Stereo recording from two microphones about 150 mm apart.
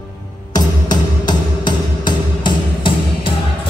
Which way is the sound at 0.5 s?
30° left (ahead or behind).